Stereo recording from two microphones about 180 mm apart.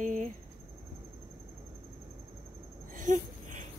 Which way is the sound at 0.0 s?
45° right (ahead or behind).